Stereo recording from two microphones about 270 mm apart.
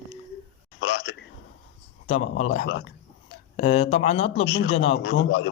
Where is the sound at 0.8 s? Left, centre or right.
Left.